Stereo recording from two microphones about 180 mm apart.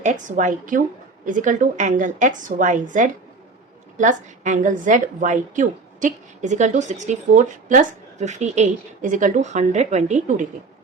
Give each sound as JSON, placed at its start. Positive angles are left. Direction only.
{"t": 0.0, "sound": "a woman's voice", "side_deg": -45}